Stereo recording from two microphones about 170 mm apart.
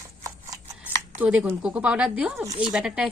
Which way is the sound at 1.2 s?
10° right (ahead or behind).